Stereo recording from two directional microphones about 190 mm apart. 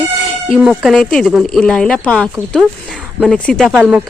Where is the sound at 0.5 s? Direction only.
5° right (ahead or behind).